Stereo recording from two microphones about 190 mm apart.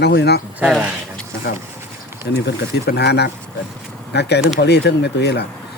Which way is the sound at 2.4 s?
60° left (ahead or behind).